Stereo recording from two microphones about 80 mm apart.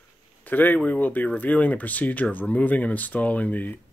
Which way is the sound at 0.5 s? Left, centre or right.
Left.